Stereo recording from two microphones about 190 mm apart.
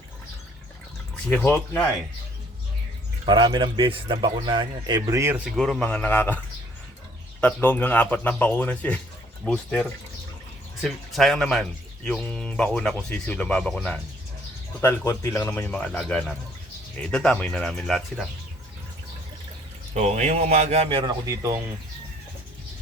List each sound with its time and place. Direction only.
1.3 s speech: 10° left (ahead or behind)
3.2 s speech: 25° right (ahead or behind)
5.5 s speech: centre (ahead or behind)
7.4 s speech: 10° left (ahead or behind)
19.9 s a man's voice: 35° right (ahead or behind)
21.2 s speech: 15° right (ahead or behind)